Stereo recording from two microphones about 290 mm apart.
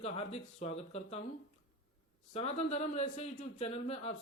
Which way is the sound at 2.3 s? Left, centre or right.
Left.